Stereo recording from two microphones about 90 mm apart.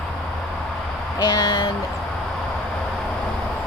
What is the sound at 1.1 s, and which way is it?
Speech, 50° left (ahead or behind).